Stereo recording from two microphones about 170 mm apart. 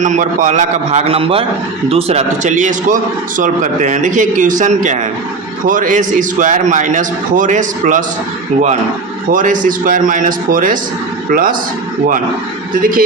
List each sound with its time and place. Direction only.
0.0 s a man's voice: 50° right (ahead or behind)
9.3 s a man's voice: 50° right (ahead or behind)
12.8 s speech: 55° right (ahead or behind)